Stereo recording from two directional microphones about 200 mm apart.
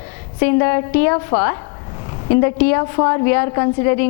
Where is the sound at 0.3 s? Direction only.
15° left (ahead or behind).